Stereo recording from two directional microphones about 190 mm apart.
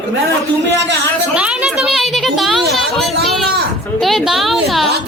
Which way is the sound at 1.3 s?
5° right (ahead or behind).